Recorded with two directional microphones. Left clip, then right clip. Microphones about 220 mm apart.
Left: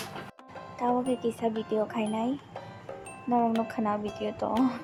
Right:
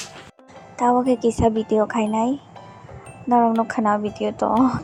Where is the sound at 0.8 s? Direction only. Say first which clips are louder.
Right 10 dB; 25° right (ahead or behind).